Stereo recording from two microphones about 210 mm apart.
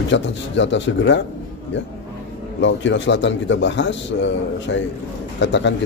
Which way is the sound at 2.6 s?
60° left (ahead or behind).